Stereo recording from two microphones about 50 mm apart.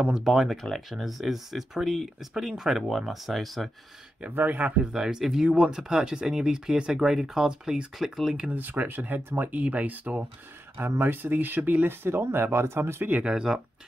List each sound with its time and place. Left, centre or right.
0.0 s speech: centre
4.5 s speech: right
4.7 s speech: centre
8.5 s speech: right
9.6 s speech: right
10.8 s speech: right
13.2 s speech: centre